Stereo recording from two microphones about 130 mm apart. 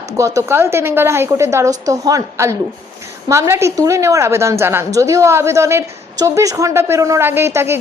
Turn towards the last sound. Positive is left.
turn(degrees=-20)  # may be behind; listen again after turning